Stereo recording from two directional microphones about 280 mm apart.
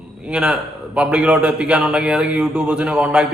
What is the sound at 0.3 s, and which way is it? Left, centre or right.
A man's voice, centre.